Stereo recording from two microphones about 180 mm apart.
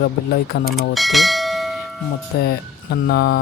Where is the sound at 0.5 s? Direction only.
70° left (ahead or behind).